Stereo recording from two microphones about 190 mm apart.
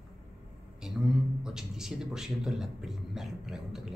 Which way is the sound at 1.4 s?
5° right (ahead or behind).